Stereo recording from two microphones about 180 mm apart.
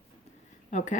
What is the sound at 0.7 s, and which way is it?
Speech, 45° left (ahead or behind).